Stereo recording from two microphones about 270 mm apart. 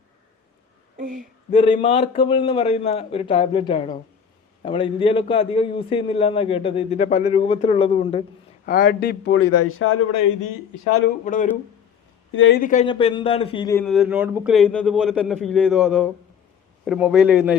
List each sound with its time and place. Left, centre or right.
0.9 s a sound: right
1.5 s a man's voice: centre
8.6 s speech: left
9.4 s speech: left
10.1 s speech: left
12.3 s speech: left
12.5 s a man's voice: left
13.8 s a man's voice: centre